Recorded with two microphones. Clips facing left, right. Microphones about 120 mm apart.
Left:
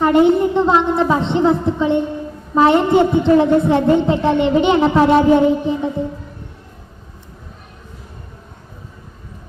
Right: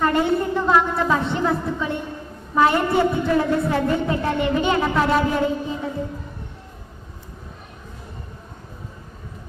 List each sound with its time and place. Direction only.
0.0 s a woman's voice: 20° left (ahead or behind)